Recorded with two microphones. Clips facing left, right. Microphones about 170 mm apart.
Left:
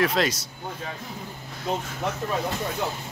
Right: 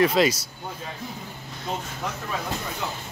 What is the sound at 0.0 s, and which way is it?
Speech, centre (ahead or behind).